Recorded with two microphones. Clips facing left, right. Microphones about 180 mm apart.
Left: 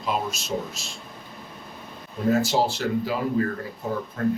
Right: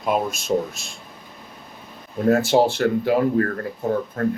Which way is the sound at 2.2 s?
60° right (ahead or behind).